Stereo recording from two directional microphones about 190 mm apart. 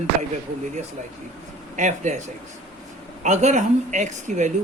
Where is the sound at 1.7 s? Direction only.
40° right (ahead or behind).